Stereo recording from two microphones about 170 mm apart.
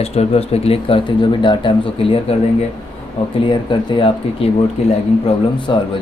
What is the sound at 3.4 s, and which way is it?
Speech, 30° left (ahead or behind).